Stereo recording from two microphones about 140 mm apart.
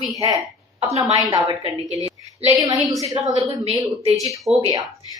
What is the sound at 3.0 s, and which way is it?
Speech, 30° right (ahead or behind).